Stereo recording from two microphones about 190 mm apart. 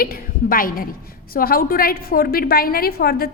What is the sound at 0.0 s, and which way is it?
A woman's voice, 50° left (ahead or behind).